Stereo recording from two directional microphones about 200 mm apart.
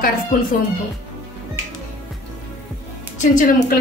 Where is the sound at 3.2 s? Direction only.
40° left (ahead or behind).